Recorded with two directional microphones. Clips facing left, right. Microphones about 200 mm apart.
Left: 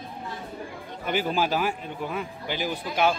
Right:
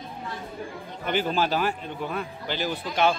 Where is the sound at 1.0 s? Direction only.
10° left (ahead or behind).